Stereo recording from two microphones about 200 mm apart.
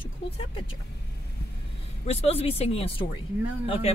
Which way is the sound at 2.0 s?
30° left (ahead or behind).